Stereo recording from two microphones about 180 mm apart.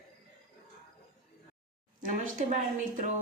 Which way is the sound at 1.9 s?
45° right (ahead or behind).